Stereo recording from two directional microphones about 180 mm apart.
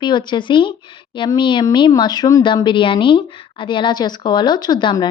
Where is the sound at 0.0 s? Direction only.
25° left (ahead or behind).